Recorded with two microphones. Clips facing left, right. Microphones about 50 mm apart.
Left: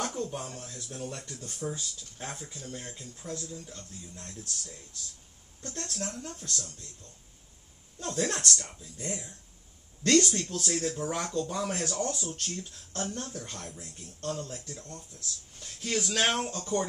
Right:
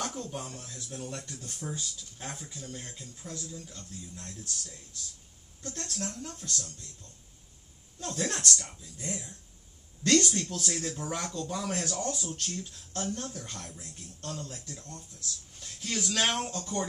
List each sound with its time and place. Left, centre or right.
0.0 s speech: centre
1.2 s speech: left
2.1 s speech: centre
3.6 s speech: left
5.7 s speech: centre
8.0 s speech: centre
14.8 s speech: left
15.6 s speech: centre